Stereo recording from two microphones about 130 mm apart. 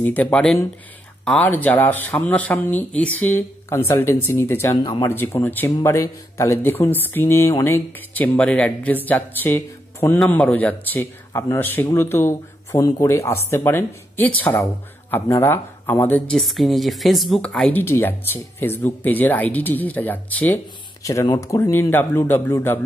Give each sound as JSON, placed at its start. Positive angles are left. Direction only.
{"t": 0.0, "sound": "speech", "side_deg": 10}
{"t": 10.1, "sound": "speech", "side_deg": 5}
{"t": 16.3, "sound": "speech", "side_deg": 0}
{"t": 21.0, "sound": "speech", "side_deg": 25}